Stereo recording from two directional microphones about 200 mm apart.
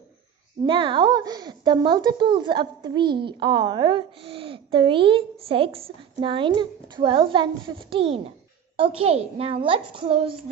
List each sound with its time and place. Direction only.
0.7 s a woman's voice: 25° right (ahead or behind)